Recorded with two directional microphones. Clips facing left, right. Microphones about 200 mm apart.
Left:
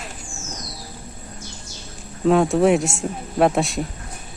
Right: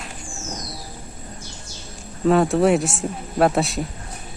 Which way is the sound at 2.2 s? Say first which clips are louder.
Left 1 dB; centre (ahead or behind).